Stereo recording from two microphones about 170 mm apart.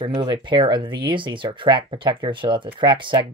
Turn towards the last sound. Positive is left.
turn(degrees=-30)  # may be behind; listen again after turning